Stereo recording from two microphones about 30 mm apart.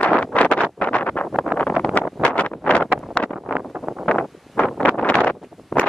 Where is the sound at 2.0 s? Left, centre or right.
Left.